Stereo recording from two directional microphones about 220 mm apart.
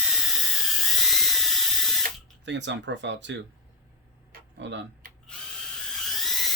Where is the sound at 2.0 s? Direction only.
55° right (ahead or behind).